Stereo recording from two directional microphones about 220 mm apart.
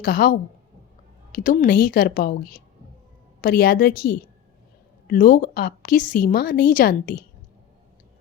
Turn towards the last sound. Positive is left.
turn(degrees=40)  # may be behind; listen again after turning